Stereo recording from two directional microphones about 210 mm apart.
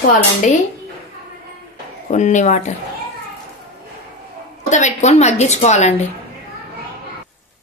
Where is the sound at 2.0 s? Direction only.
35° left (ahead or behind).